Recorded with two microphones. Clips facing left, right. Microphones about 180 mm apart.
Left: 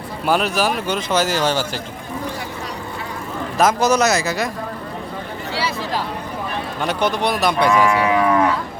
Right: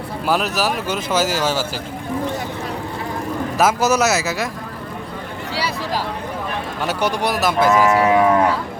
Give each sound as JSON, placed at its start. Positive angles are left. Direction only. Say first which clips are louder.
{"t": 0.3, "sound": "speech", "louder": "left 1 dB", "side_deg": 0}
{"t": 3.6, "sound": "speech", "louder": "left 1 dB", "side_deg": -5}
{"t": 6.8, "sound": "speech", "louder": "left 1 dB", "side_deg": -10}
{"t": 8.0, "sound": "cattle", "louder": "right 2 dB", "side_deg": -35}